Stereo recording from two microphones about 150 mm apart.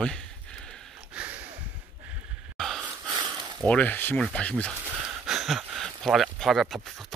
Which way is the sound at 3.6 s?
10° left (ahead or behind).